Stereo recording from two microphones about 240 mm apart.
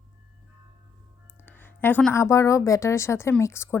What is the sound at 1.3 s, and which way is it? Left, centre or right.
A woman's voice, centre.